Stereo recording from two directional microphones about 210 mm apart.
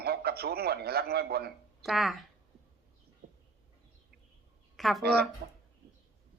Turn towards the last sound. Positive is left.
turn(degrees=-55)  # may be behind; listen again after turning